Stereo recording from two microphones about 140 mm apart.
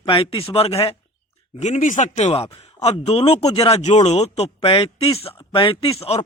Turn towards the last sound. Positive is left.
turn(degrees=45)  # may be behind; listen again after turning